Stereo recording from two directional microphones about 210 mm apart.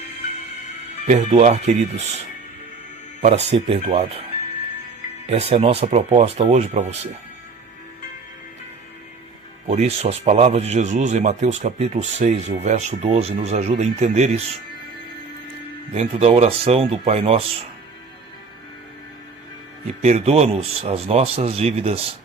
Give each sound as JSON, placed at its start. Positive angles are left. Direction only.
{"t": 1.0, "sound": "speech", "side_deg": -35}
{"t": 3.2, "sound": "speech", "side_deg": -35}
{"t": 5.2, "sound": "speech", "side_deg": -30}
{"t": 9.6, "sound": "speech", "side_deg": -30}
{"t": 16.0, "sound": "speech", "side_deg": -30}
{"t": 20.0, "sound": "speech", "side_deg": -30}